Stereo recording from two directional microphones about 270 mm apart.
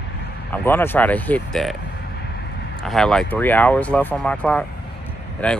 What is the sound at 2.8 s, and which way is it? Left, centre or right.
Speech, centre.